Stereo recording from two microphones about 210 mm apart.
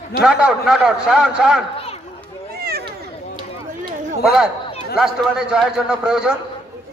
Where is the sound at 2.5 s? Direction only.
50° right (ahead or behind).